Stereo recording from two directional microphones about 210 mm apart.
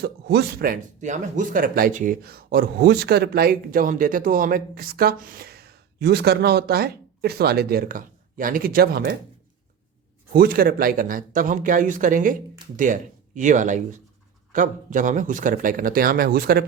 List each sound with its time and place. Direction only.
0.0 s speech: 50° right (ahead or behind)
10.3 s speech: 45° right (ahead or behind)